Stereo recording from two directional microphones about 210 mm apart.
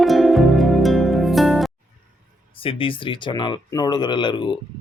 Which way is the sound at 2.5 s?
25° left (ahead or behind).